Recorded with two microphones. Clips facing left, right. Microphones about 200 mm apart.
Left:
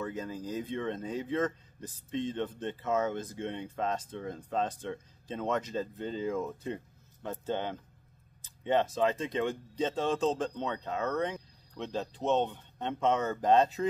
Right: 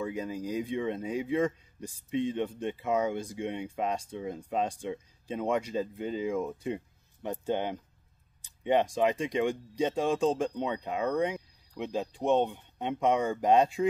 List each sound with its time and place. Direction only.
0.0 s speech: 10° right (ahead or behind)